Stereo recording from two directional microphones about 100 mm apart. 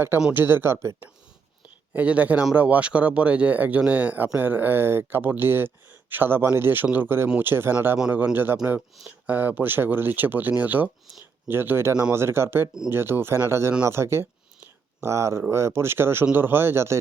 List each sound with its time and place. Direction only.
0.3 s speech: 20° right (ahead or behind)
1.9 s speech: 15° right (ahead or behind)